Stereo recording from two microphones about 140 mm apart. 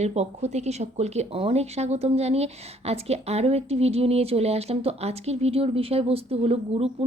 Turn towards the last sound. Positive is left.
turn(degrees=-45)  # may be behind; listen again after turning